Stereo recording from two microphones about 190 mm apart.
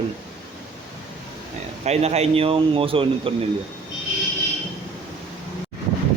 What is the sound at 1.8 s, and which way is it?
Speech, 35° right (ahead or behind).